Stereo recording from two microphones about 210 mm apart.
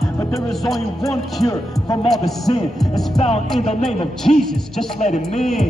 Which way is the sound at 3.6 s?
30° left (ahead or behind).